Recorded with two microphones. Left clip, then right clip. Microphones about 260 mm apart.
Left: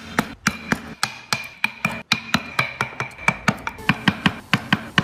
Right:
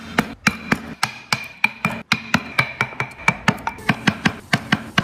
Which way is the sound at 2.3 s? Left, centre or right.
Centre.